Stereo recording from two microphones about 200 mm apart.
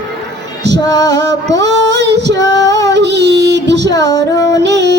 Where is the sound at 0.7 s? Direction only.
20° left (ahead or behind).